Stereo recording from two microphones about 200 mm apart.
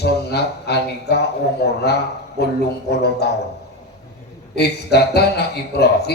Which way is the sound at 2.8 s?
55° left (ahead or behind).